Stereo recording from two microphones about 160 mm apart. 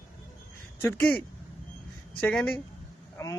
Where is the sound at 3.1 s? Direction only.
20° left (ahead or behind).